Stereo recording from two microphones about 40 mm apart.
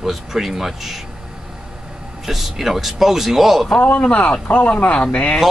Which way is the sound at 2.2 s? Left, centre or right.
Centre.